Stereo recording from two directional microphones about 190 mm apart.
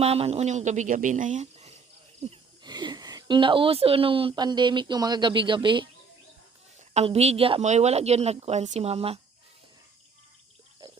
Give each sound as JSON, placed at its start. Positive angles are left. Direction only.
{"t": 0.0, "sound": "a woman's voice", "side_deg": -30}
{"t": 2.2, "sound": "speech", "side_deg": -25}
{"t": 6.9, "sound": "a woman's voice", "side_deg": -35}